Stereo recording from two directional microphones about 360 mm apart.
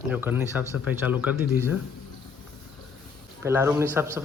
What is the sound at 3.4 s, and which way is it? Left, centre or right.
Speech, centre.